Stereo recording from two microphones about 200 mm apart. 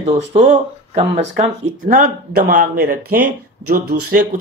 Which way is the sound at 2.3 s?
50° right (ahead or behind).